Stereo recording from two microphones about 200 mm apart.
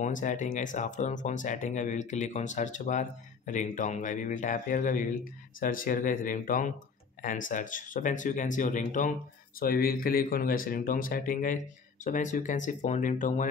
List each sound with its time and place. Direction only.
0.0 s speech: 40° left (ahead or behind)